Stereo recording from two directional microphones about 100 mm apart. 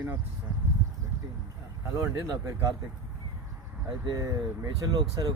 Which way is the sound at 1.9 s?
30° right (ahead or behind).